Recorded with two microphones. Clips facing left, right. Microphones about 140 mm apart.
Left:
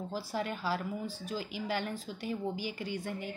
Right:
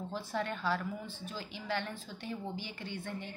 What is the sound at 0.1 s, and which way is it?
Speech, 5° left (ahead or behind).